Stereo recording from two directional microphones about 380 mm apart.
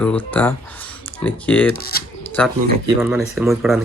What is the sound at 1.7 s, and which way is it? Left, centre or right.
Speech, left.